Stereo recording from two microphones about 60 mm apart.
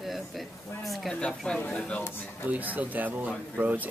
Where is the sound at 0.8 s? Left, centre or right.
Centre.